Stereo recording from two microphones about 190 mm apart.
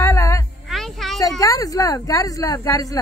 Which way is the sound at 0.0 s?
15° left (ahead or behind).